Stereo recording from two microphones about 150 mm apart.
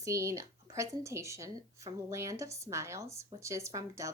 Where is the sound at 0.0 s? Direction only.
20° right (ahead or behind).